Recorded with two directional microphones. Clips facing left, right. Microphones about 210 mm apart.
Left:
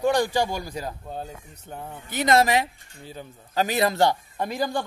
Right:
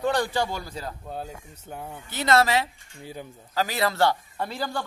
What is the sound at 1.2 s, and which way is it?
Speech, 5° right (ahead or behind).